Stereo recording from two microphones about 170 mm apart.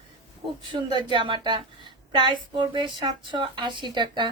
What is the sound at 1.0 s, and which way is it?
A woman's voice, 30° right (ahead or behind).